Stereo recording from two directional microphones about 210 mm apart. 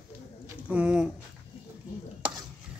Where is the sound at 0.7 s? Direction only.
5° right (ahead or behind).